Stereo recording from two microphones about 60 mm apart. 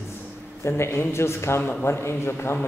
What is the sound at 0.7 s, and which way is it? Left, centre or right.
Speech, left.